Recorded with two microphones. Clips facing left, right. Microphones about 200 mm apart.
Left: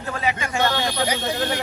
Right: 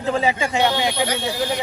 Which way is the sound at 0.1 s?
25° right (ahead or behind).